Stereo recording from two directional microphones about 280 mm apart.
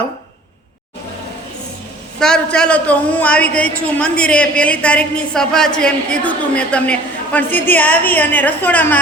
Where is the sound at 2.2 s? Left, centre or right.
Centre.